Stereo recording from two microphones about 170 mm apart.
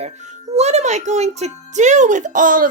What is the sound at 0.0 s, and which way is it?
A child's voice, 40° right (ahead or behind).